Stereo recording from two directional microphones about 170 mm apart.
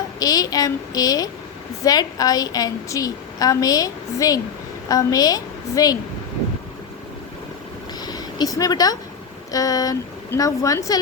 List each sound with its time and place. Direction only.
0.2 s a woman's voice: 20° left (ahead or behind)
8.0 s a sound: 25° left (ahead or behind)
9.5 s a woman's voice: 20° left (ahead or behind)